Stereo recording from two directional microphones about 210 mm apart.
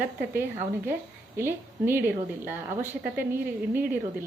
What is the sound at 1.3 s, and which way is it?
A woman's voice, 10° right (ahead or behind).